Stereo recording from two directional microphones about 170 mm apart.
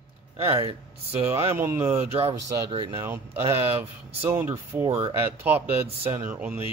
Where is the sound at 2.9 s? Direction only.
15° right (ahead or behind).